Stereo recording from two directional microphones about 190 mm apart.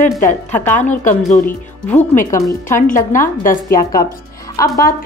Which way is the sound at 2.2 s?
15° left (ahead or behind).